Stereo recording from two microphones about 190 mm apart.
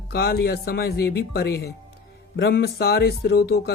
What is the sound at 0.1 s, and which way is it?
Speech, 55° left (ahead or behind).